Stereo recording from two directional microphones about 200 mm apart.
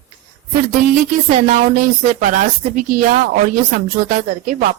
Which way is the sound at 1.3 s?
40° right (ahead or behind).